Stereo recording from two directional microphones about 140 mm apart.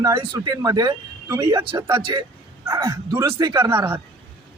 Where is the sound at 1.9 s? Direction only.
35° right (ahead or behind).